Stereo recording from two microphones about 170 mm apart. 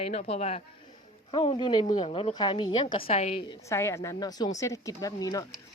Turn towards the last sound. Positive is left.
turn(degrees=20)  # may be behind; listen again after turning